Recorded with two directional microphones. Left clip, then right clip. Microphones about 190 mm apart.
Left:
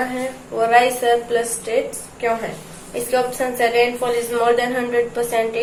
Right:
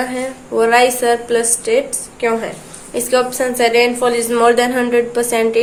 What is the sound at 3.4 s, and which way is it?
Speech, 50° right (ahead or behind).